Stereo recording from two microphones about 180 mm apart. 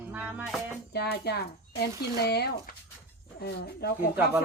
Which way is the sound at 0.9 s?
60° left (ahead or behind).